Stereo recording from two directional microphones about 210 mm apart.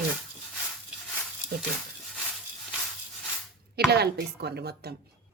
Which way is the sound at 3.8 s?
50° right (ahead or behind).